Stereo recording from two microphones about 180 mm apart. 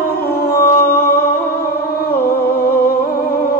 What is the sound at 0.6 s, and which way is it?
Music, 55° left (ahead or behind).